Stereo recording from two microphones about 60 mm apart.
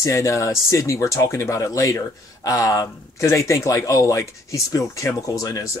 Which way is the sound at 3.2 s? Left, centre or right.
Left.